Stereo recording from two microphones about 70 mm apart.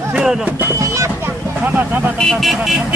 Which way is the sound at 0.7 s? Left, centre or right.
Right.